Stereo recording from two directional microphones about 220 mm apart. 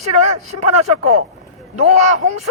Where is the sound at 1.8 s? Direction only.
30° right (ahead or behind).